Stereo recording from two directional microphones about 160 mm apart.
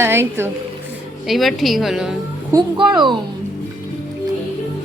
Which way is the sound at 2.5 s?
25° right (ahead or behind).